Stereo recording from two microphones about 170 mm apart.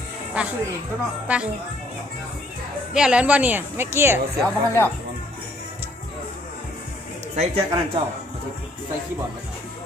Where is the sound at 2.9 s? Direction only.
5° right (ahead or behind).